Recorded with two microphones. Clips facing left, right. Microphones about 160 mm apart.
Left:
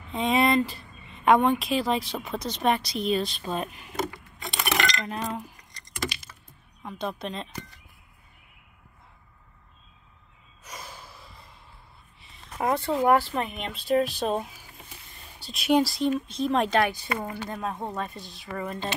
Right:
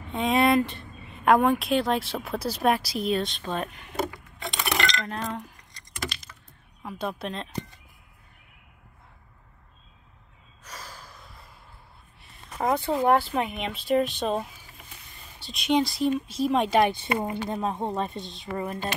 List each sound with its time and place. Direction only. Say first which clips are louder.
0.1 s speech: right 1 dB; centre (ahead or behind)
6.8 s speech: right 1 dB; 5° right (ahead or behind)
10.6 s gasp: left 1 dB; 10° left (ahead or behind)
12.2 s speech: even; centre (ahead or behind)
16.8 s a woman's voice: right 3 dB; 25° right (ahead or behind)